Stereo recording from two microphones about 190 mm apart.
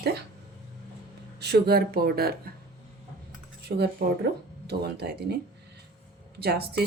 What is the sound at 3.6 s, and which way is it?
Speech, 60° right (ahead or behind).